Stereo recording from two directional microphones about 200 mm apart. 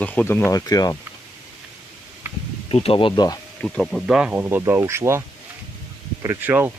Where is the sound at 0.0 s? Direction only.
10° left (ahead or behind).